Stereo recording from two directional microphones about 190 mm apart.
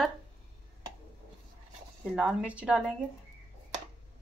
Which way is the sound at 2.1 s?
5° right (ahead or behind).